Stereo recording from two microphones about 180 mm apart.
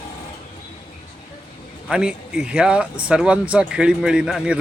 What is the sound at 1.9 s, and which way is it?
Speech, 5° right (ahead or behind).